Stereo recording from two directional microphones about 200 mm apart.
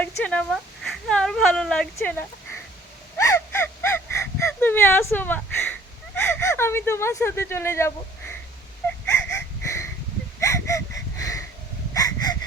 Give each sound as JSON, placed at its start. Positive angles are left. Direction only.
{"t": 0.0, "sound": "speech", "side_deg": 5}
{"t": 3.2, "sound": "gasp", "side_deg": 15}
{"t": 6.1, "sound": "speech", "side_deg": 10}
{"t": 9.0, "sound": "wheeze", "side_deg": 15}
{"t": 10.4, "sound": "a sound", "side_deg": 15}